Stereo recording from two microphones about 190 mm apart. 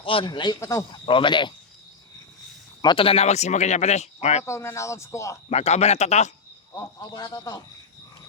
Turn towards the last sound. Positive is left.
turn(degrees=20)  # may be behind; listen again after turning